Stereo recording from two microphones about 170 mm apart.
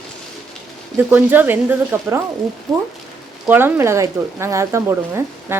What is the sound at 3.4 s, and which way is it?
Speech, 10° right (ahead or behind).